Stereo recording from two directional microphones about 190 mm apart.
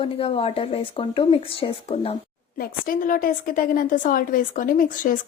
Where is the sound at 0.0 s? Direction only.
30° left (ahead or behind).